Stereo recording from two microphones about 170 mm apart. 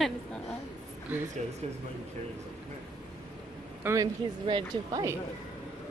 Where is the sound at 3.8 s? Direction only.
20° right (ahead or behind).